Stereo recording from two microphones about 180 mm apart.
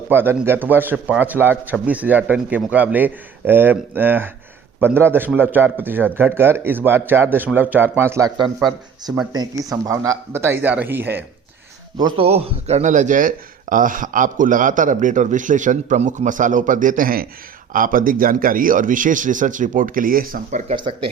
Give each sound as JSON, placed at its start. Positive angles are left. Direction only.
{"t": 0.1, "sound": "a man's voice", "side_deg": -10}
{"t": 9.3, "sound": "a man's voice", "side_deg": -20}
{"t": 11.9, "sound": "speech", "side_deg": -25}
{"t": 20.7, "sound": "speech", "side_deg": -25}